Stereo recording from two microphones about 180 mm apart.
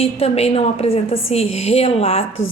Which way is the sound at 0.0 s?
35° left (ahead or behind).